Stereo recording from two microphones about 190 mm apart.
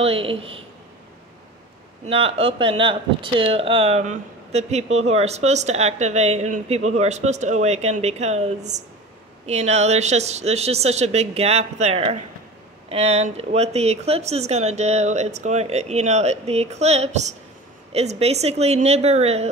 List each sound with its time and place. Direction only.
0.0 s speech: 30° right (ahead or behind)
2.0 s speech: 30° right (ahead or behind)